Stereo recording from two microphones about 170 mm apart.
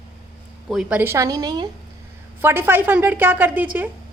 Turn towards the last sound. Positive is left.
turn(degrees=-10)  # may be behind; listen again after turning